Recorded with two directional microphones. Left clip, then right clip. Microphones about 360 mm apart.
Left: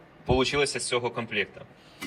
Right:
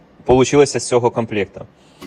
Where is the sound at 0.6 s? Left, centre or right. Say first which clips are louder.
Right 12 dB; centre.